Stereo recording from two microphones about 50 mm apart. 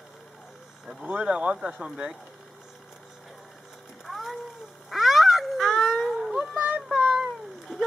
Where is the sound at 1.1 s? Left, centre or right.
Centre.